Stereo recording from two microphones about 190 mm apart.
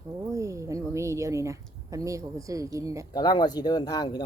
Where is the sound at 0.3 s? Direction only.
15° right (ahead or behind).